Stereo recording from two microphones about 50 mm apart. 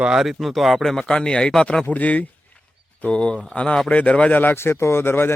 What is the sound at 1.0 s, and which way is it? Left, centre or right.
Speech, centre.